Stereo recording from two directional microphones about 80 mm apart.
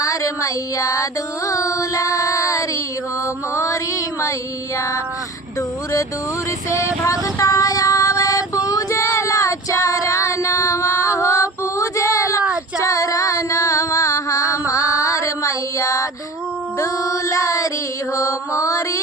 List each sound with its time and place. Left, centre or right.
0.0 s child singing: left
3.5 s music: left
6.7 s music: left
14.7 s female singing: left
16.7 s music: left
18.1 s mantra: left